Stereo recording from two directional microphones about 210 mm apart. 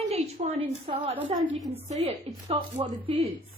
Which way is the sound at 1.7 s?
30° right (ahead or behind).